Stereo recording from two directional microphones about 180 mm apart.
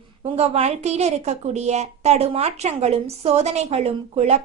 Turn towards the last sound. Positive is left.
turn(degrees=-35)  # may be behind; listen again after turning